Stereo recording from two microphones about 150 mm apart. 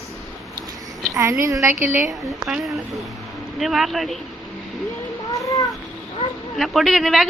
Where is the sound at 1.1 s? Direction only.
20° right (ahead or behind).